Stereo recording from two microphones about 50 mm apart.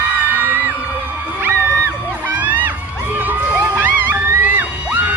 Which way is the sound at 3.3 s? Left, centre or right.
Right.